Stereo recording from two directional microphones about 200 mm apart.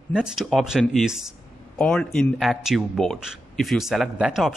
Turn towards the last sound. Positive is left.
turn(degrees=-5)  # may be behind; listen again after turning